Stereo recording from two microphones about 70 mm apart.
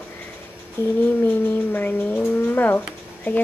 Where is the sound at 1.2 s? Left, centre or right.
Left.